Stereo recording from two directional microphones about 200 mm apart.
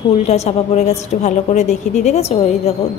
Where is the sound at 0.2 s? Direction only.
35° left (ahead or behind).